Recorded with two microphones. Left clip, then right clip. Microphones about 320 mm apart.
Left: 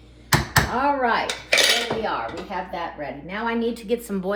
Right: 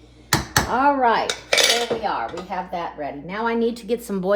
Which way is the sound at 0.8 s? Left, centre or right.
Right.